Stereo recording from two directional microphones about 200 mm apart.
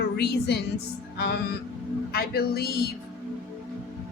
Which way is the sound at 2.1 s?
50° left (ahead or behind).